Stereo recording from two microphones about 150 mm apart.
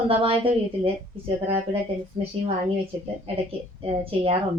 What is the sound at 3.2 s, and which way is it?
Speech, 40° right (ahead or behind).